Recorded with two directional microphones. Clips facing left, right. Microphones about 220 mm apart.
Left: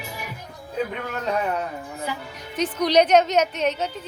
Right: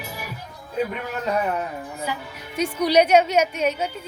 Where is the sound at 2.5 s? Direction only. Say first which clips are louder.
Right 1 dB; 10° right (ahead or behind).